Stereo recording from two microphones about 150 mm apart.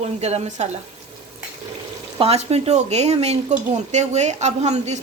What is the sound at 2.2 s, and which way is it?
Speech, 45° right (ahead or behind).